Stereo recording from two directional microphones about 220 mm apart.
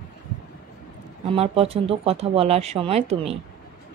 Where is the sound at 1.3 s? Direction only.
25° right (ahead or behind).